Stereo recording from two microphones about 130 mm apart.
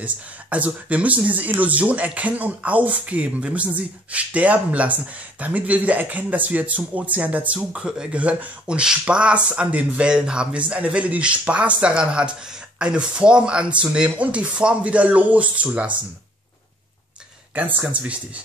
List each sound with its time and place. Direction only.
0.0 s speech: 10° right (ahead or behind)
17.6 s speech: 10° right (ahead or behind)